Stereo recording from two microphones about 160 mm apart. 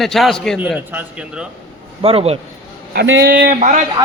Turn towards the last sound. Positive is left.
turn(degrees=-55)  # may be behind; listen again after turning